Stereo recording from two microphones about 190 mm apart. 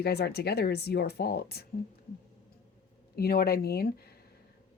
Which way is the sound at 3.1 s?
55° left (ahead or behind).